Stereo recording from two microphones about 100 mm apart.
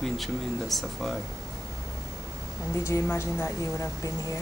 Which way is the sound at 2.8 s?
25° left (ahead or behind).